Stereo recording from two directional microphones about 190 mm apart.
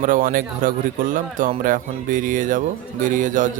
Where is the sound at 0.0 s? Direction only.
45° right (ahead or behind).